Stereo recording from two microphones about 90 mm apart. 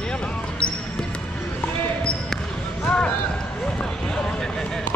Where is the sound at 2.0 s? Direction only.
10° left (ahead or behind).